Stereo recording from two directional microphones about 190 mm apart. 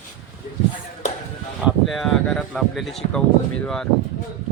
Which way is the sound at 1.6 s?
Centre (ahead or behind).